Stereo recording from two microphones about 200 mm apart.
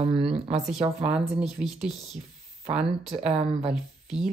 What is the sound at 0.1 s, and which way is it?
Speech, 5° right (ahead or behind).